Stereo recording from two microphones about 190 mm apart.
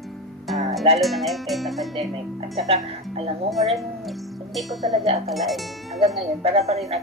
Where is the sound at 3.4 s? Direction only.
Centre (ahead or behind).